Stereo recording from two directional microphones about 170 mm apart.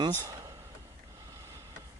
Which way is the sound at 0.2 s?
20° right (ahead or behind).